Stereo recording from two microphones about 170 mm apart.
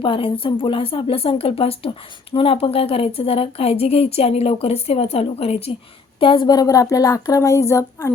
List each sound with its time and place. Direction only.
0.0 s speech: 30° left (ahead or behind)